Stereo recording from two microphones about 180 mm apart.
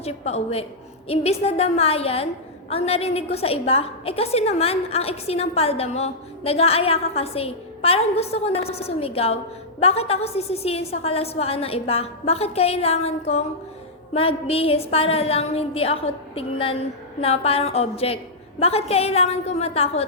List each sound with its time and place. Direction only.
0.0 s a woman's voice: 35° left (ahead or behind)